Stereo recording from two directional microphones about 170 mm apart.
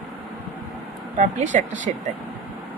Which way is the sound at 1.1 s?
45° right (ahead or behind).